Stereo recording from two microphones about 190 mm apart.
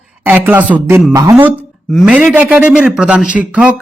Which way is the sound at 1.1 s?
15° right (ahead or behind).